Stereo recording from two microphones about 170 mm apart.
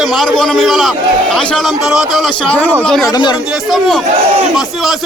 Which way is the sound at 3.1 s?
25° left (ahead or behind).